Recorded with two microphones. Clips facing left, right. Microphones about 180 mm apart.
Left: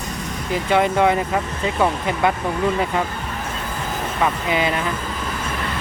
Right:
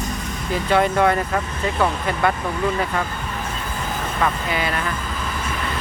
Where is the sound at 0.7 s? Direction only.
15° left (ahead or behind).